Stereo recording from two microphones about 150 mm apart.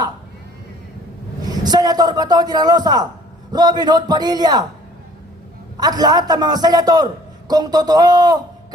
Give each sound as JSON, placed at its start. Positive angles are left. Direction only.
{"t": 1.5, "sound": "a man's voice", "side_deg": -25}
{"t": 5.8, "sound": "a man's voice", "side_deg": -25}